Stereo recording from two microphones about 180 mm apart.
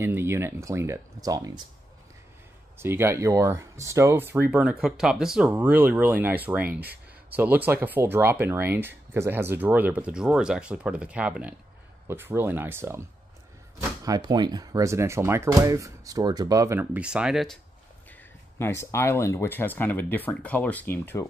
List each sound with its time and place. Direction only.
0.0 s speech: 15° right (ahead or behind)
2.8 s speech: 15° right (ahead or behind)
14.0 s speech: 20° right (ahead or behind); by 17.6 s centre (ahead or behind)
18.6 s speech: 15° left (ahead or behind)